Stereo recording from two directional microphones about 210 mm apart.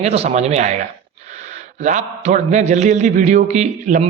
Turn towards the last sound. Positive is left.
turn(degrees=-35)  # may be behind; listen again after turning